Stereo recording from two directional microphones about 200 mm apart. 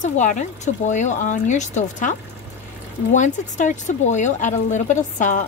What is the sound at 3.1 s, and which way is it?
Speech, 40° left (ahead or behind).